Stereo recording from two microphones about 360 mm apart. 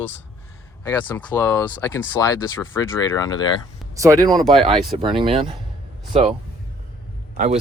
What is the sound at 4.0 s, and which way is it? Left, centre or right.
Speech, centre.